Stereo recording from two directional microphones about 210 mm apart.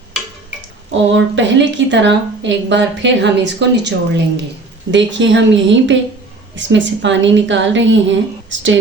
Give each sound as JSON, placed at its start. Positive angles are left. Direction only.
{"t": 0.9, "sound": "a woman's voice", "side_deg": -60}